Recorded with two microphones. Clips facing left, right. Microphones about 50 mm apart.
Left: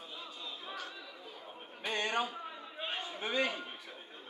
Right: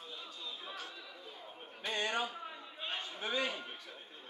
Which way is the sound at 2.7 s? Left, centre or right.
Centre.